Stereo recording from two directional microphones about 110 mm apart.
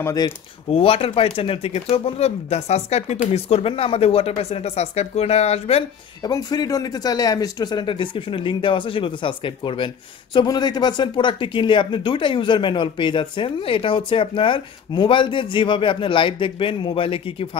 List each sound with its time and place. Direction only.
0.0 s speech: 35° left (ahead or behind)
0.7 s speech: 60° left (ahead or behind); by 3.2 s 85° left
3.3 s speech: 65° left (ahead or behind)
6.2 s speech: 40° left (ahead or behind)
10.3 s speech: 40° left (ahead or behind); by 17.5 s 55° left (ahead or behind)